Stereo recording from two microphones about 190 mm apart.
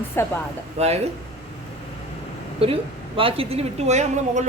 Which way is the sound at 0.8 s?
35° right (ahead or behind).